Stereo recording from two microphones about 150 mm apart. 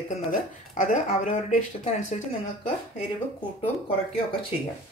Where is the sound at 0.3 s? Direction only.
55° left (ahead or behind).